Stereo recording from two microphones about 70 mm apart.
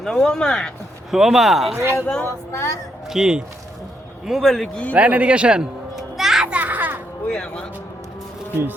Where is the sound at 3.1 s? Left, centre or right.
Centre.